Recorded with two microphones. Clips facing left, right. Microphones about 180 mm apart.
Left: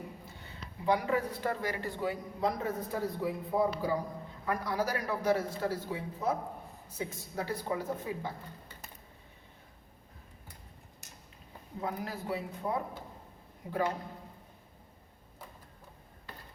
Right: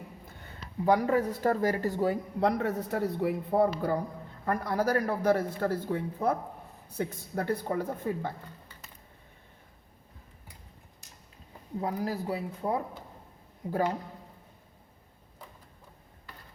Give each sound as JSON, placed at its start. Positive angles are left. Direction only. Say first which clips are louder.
{"t": 0.3, "sound": "speech", "louder": "right 1 dB", "side_deg": -45}
{"t": 2.4, "sound": "a man's voice", "louder": "right 4 dB", "side_deg": -70}
{"t": 11.8, "sound": "speech", "louder": "right 5 dB", "side_deg": -35}